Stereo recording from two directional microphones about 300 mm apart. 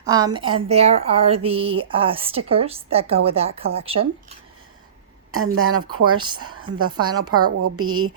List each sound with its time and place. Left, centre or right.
0.0 s a woman's voice: centre
5.3 s a woman's voice: right
6.1 s speech: centre
6.6 s a woman's voice: right
7.0 s speech: centre
7.3 s a woman's voice: right